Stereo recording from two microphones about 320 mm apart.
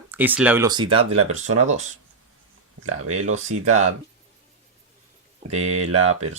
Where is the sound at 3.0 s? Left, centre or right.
Right.